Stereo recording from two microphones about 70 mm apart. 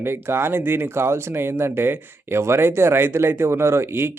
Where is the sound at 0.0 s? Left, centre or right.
Right.